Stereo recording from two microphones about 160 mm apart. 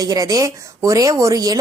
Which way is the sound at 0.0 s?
20° right (ahead or behind).